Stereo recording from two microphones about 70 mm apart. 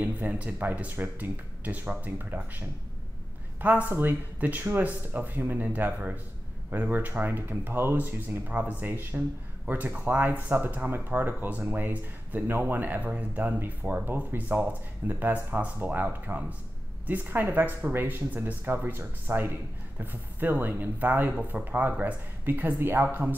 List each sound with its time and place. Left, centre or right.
0.0 s speech: centre
3.6 s speech: right